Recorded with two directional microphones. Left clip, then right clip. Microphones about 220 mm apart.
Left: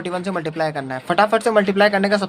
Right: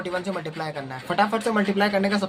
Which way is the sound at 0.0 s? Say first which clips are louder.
Left 4 dB; 50° left (ahead or behind).